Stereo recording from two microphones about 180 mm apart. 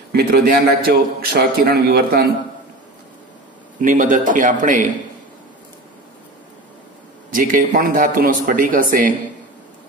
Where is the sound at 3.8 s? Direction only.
45° right (ahead or behind).